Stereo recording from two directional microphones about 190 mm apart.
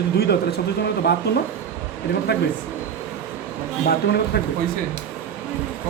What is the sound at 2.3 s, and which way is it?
Speech, 60° left (ahead or behind).